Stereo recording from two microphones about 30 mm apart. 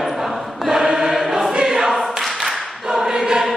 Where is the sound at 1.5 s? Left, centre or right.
Right.